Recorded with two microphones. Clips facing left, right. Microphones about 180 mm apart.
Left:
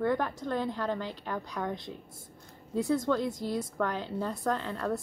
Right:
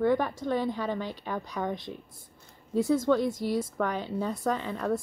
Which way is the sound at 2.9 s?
Centre (ahead or behind).